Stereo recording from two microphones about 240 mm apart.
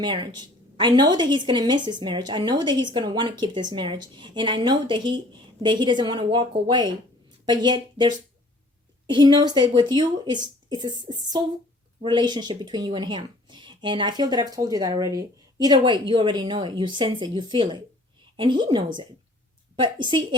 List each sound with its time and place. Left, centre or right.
0.0 s a woman's voice: centre
19.8 s a woman's voice: centre